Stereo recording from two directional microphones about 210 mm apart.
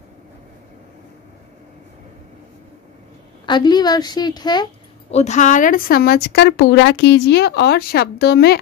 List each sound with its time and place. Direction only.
3.4 s a woman's voice: 20° left (ahead or behind)
5.1 s a woman's voice: 35° left (ahead or behind); by 8.5 s 50° left (ahead or behind)